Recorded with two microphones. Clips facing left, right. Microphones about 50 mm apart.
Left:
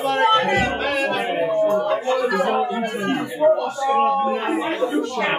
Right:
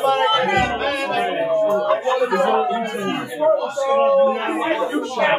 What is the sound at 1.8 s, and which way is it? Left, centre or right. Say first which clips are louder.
Speech: right 2 dB; right.